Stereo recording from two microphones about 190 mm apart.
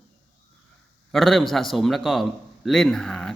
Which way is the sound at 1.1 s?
Centre (ahead or behind).